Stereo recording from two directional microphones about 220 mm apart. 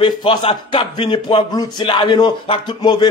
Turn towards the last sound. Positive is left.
turn(degrees=20)  # may be behind; listen again after turning